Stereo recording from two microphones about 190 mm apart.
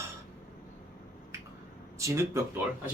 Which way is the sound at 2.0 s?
15° right (ahead or behind).